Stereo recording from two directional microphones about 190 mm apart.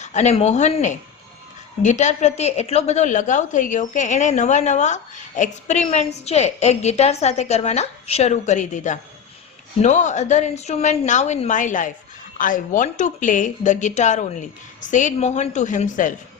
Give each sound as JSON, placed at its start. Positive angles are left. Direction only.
{"t": 0.0, "sound": "a woman's voice", "side_deg": 35}